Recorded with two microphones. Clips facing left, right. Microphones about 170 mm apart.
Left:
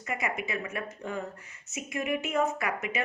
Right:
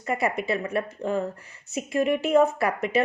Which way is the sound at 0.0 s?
35° right (ahead or behind).